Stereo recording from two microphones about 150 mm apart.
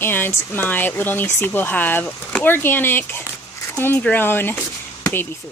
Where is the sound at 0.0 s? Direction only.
15° left (ahead or behind).